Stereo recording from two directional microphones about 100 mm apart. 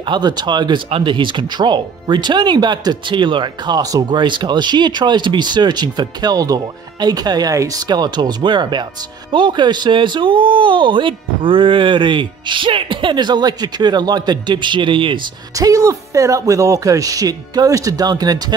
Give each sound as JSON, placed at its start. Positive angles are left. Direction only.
{"t": 0.0, "sound": "speech", "side_deg": -45}
{"t": 0.8, "sound": "speech", "side_deg": -65}
{"t": 15.5, "sound": "speech", "side_deg": -35}